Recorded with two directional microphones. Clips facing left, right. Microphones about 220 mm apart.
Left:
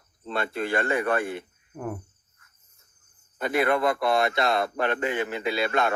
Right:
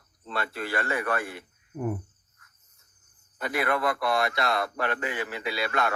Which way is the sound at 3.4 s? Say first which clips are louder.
Left 4 dB; 25° left (ahead or behind).